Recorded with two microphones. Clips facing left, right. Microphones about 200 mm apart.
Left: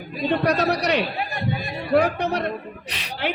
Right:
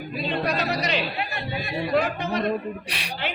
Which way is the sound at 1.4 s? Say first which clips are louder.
Left 1 dB; 50° left (ahead or behind).